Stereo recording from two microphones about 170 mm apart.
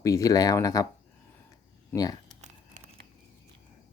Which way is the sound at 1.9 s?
10° left (ahead or behind).